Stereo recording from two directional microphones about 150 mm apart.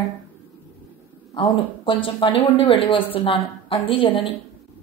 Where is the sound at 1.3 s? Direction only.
35° left (ahead or behind).